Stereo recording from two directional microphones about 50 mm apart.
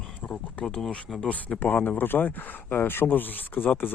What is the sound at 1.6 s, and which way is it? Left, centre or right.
Speech, left.